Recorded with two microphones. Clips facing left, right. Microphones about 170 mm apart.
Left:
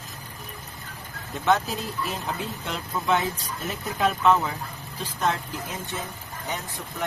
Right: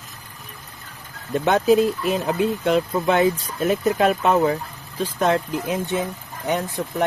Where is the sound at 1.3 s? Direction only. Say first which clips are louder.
Right 8 dB; 55° right (ahead or behind).